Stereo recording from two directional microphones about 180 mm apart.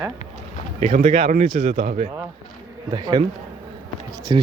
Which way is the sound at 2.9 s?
25° right (ahead or behind).